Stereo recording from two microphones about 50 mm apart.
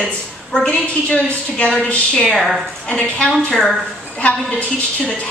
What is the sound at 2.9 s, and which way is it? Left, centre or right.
A woman's voice, left.